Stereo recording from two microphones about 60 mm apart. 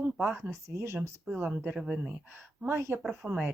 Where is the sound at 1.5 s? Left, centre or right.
Right.